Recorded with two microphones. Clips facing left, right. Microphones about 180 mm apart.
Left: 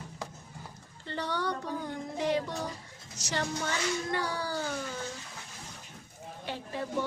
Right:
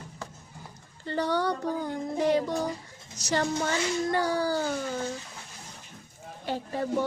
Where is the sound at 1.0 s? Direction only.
40° right (ahead or behind).